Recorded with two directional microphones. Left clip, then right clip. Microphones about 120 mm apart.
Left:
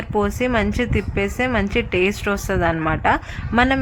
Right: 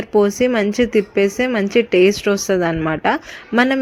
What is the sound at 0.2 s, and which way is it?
A woman's voice, 30° right (ahead or behind).